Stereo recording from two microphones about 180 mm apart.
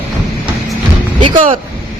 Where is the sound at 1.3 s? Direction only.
45° right (ahead or behind).